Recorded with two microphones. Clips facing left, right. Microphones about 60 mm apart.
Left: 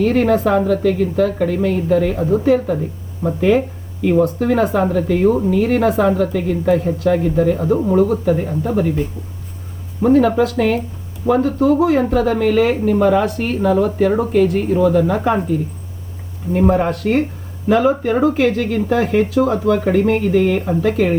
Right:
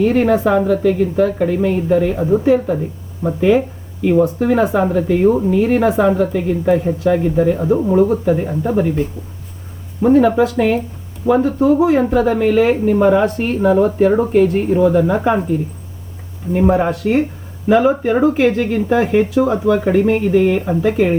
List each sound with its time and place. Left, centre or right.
0.0 s speech: centre
10.0 s speech: centre
16.5 s speech: centre